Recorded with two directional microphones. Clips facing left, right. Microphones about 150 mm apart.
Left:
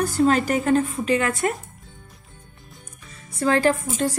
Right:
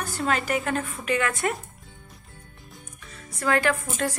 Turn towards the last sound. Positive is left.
turn(degrees=30)  # may be behind; listen again after turning